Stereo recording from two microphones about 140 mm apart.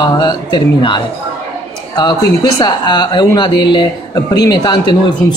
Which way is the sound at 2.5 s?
30° left (ahead or behind).